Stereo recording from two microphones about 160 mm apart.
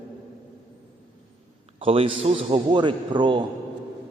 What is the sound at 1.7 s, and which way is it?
A man's voice, 35° right (ahead or behind).